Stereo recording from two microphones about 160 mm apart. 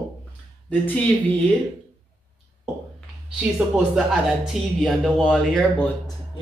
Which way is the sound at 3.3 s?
5° right (ahead or behind).